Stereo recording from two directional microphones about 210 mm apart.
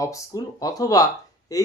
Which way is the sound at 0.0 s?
15° left (ahead or behind).